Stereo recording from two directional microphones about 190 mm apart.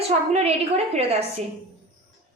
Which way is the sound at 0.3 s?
35° right (ahead or behind).